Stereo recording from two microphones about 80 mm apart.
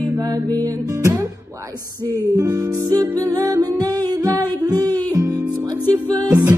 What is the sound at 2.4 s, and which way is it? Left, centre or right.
Music, right.